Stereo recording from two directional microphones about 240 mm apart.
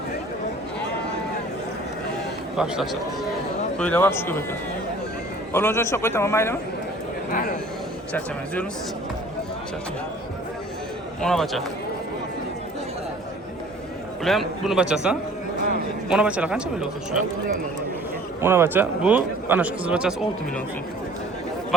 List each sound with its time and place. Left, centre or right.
2.6 s a man's voice: centre
5.5 s a man's voice: centre
7.3 s speech: left
11.2 s speech: centre
14.3 s speech: centre
18.3 s a man's voice: centre